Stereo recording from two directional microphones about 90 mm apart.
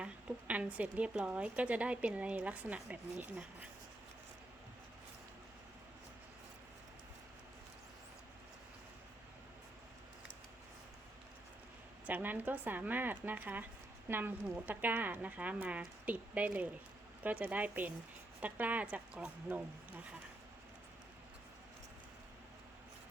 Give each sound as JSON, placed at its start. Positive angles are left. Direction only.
{"t": 0.0, "sound": "a woman's voice", "side_deg": -15}
{"t": 12.0, "sound": "a woman's voice", "side_deg": -20}